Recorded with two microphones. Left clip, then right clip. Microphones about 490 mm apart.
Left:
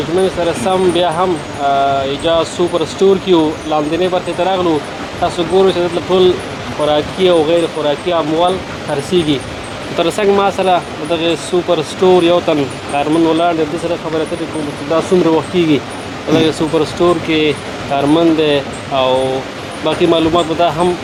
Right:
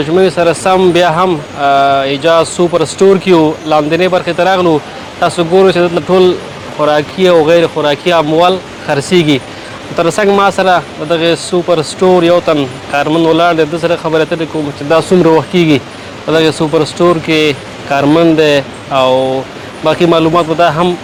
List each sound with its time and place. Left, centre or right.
0.2 s speech: right
15.5 s speech: right